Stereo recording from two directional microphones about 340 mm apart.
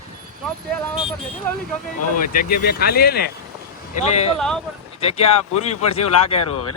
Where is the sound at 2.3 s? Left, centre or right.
Left.